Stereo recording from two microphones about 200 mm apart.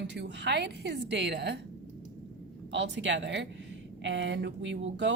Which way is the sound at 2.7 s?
60° right (ahead or behind).